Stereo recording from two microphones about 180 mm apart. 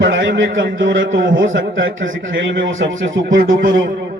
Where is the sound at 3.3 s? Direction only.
50° right (ahead or behind).